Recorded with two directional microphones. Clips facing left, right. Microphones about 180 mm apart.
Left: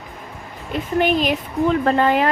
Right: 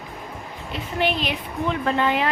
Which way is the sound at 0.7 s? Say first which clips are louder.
Left 6 dB; 45° left (ahead or behind).